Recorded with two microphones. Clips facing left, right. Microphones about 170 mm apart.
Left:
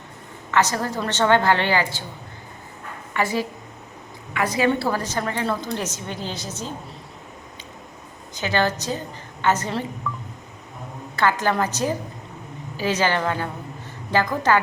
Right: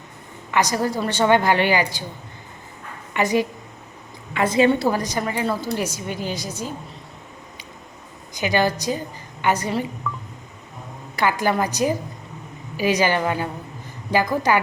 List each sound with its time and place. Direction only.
0.5 s a woman's voice: 15° right (ahead or behind)
3.1 s a woman's voice: 20° right (ahead or behind)
8.4 s a woman's voice: 10° right (ahead or behind)
11.2 s a woman's voice: 10° right (ahead or behind)